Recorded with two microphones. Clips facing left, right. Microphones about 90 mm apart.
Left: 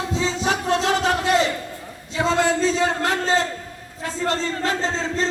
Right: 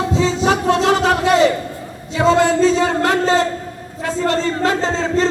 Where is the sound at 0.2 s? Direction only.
70° right (ahead or behind).